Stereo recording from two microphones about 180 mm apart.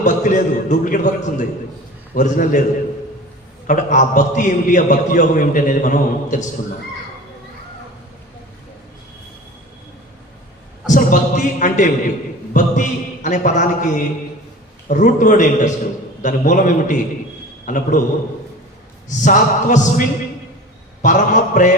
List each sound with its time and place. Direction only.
0.0 s a man's voice: 45° left (ahead or behind)
3.7 s a man's voice: 45° left (ahead or behind)
10.8 s a sound: 45° left (ahead or behind)
12.5 s a man's voice: 45° left (ahead or behind)
19.0 s a man's voice: 45° left (ahead or behind)